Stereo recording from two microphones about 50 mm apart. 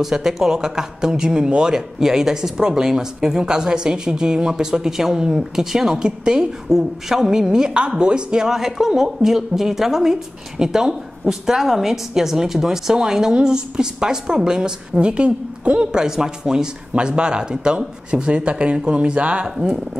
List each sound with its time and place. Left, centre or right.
0.0 s speech: centre
8.5 s speech: centre; by 19.5 s right